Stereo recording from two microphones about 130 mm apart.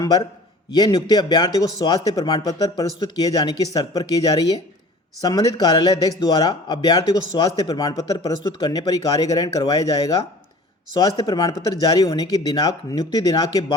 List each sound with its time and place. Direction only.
0.0 s a man's voice: 30° left (ahead or behind)